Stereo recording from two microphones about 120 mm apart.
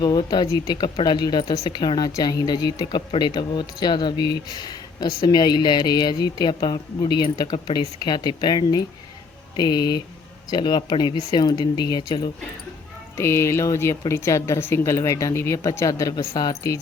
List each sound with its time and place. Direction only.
0.0 s speech: 35° left (ahead or behind)
13.1 s speech: 20° left (ahead or behind)